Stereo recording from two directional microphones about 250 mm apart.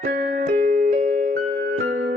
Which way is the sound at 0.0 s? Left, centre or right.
Right.